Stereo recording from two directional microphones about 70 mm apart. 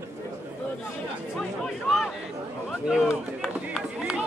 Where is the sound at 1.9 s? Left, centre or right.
Centre.